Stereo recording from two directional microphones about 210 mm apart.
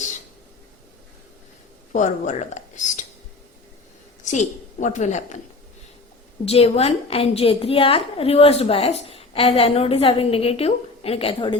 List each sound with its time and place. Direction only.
1.9 s a woman's voice: 35° left (ahead or behind)
4.2 s a woman's voice: 35° left (ahead or behind)
6.4 s a woman's voice: 30° left (ahead or behind)